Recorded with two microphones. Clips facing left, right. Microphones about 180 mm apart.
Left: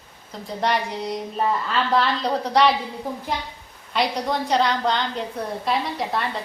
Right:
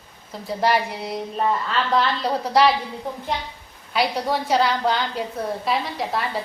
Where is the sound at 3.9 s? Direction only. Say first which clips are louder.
Right 1 dB; 5° right (ahead or behind).